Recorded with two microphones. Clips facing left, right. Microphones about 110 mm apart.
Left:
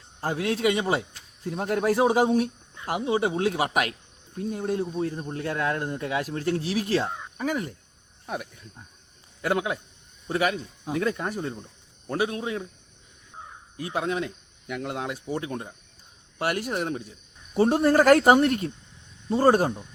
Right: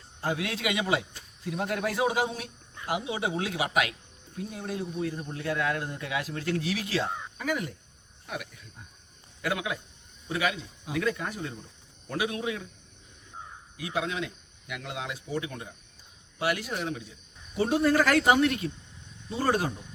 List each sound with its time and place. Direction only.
0.2 s speech: 40° left (ahead or behind)
13.7 s speech: 40° left (ahead or behind)